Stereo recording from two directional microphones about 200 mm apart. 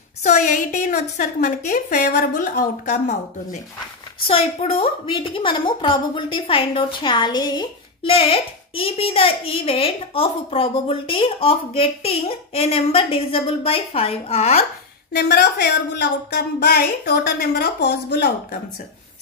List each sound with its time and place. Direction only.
0.2 s a woman's voice: 40° left (ahead or behind)
4.3 s a woman's voice: 30° left (ahead or behind)
15.1 s a woman's voice: 50° left (ahead or behind)